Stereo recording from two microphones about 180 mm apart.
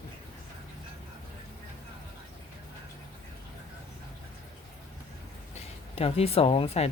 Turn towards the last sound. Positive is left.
turn(degrees=35)  # may be behind; listen again after turning